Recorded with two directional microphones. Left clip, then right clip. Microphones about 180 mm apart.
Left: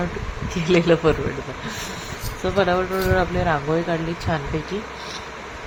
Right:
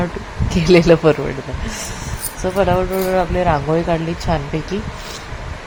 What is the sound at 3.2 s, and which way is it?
Speech, 15° right (ahead or behind).